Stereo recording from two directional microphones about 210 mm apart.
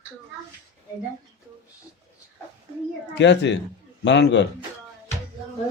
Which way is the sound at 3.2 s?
55° left (ahead or behind).